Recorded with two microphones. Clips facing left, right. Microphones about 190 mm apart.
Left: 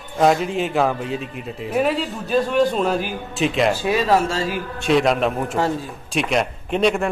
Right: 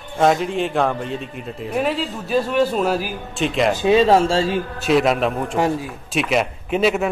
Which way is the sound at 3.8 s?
25° right (ahead or behind).